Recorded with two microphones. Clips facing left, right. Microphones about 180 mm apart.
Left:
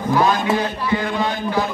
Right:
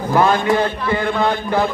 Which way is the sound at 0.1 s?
55° right (ahead or behind).